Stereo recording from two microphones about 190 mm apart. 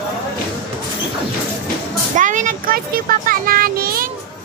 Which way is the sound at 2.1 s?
40° right (ahead or behind).